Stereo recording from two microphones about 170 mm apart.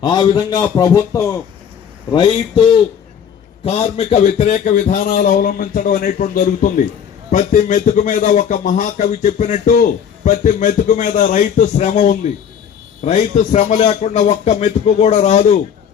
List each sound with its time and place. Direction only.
0.0 s speech: 25° left (ahead or behind)